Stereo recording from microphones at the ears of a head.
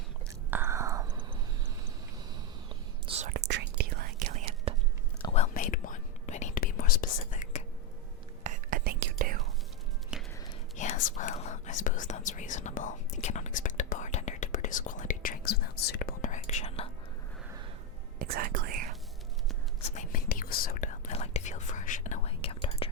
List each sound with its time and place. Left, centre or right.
0.6 s whispering: right
3.1 s whispering: right
5.2 s whispering: left
8.4 s whispering: right
10.8 s whispering: left
18.2 s whispering: right
19.8 s whispering: left